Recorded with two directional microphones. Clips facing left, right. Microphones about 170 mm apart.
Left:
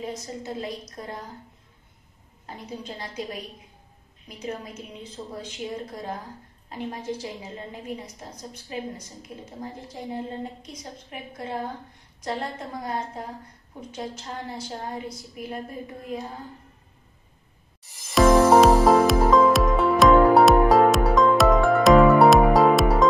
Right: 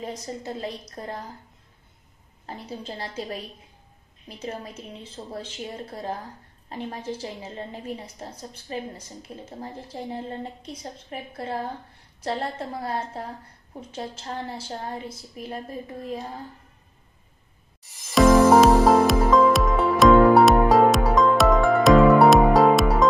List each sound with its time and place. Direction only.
1.0 s a woman's voice: 35° right (ahead or behind)
2.4 s a woman's voice: 30° right (ahead or behind)
4.3 s a woman's voice: 30° right (ahead or behind)
7.7 s a woman's voice: 30° right (ahead or behind)
17.8 s music: centre (ahead or behind)